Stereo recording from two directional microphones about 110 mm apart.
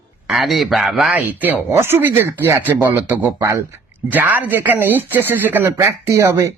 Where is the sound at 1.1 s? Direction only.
15° right (ahead or behind).